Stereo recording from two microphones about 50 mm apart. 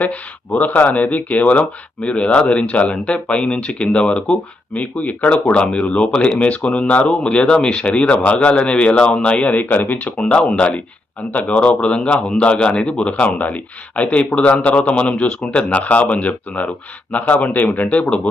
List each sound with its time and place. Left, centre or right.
0.0 s speech: left